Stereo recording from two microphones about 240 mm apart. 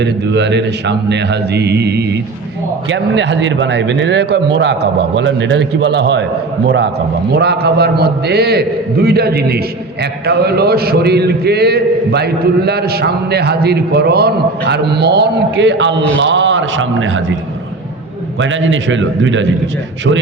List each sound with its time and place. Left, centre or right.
0.0 s a man's voice: right
18.3 s a man's voice: right